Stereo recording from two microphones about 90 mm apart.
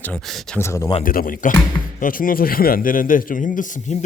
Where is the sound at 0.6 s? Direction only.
30° left (ahead or behind).